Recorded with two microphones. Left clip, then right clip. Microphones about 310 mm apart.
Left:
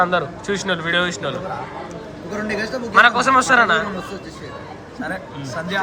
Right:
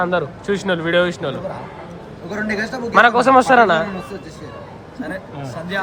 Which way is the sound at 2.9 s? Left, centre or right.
Centre.